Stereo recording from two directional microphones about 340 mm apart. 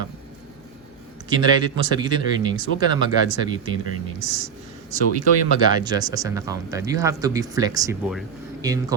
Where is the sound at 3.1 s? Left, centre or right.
Left.